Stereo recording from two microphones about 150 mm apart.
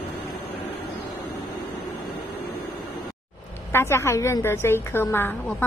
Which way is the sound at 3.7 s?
15° left (ahead or behind).